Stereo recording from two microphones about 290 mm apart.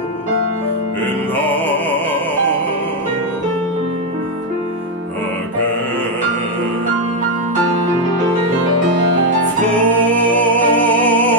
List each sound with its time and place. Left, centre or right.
1.3 s music: centre
9.8 s music: centre